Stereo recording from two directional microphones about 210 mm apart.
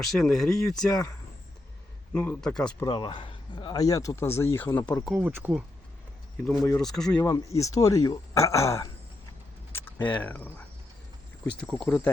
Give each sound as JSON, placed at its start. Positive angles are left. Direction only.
{"t": 0.0, "sound": "speech", "side_deg": 0}
{"t": 2.1, "sound": "speech", "side_deg": 5}
{"t": 2.8, "sound": "speech", "side_deg": 20}
{"t": 5.0, "sound": "speech", "side_deg": -5}
{"t": 6.4, "sound": "speech", "side_deg": 5}